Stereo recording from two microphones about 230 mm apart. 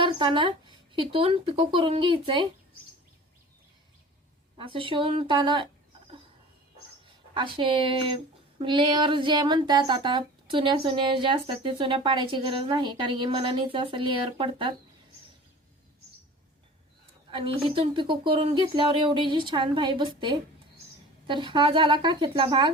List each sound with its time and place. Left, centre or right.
0.0 s speech: right
4.5 s speech: right
7.3 s speech: right
17.3 s speech: right